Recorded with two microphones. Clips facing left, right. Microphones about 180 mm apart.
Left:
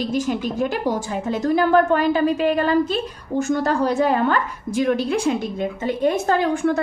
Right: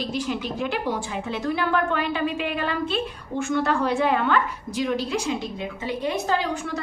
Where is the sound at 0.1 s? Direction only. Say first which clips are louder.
Left 5 dB; 45° left (ahead or behind).